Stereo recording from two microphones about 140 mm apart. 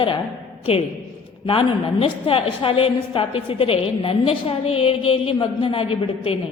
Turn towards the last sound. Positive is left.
turn(degrees=40)  # may be behind; listen again after turning